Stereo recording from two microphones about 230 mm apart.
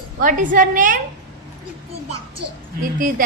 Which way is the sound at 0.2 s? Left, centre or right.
Right.